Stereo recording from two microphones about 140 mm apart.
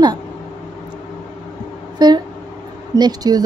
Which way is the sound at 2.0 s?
30° right (ahead or behind).